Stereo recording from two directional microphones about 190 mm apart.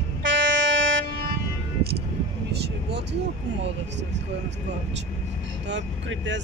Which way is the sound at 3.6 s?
70° right (ahead or behind).